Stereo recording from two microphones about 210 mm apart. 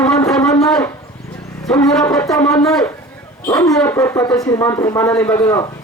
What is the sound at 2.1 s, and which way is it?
Speech, 15° left (ahead or behind).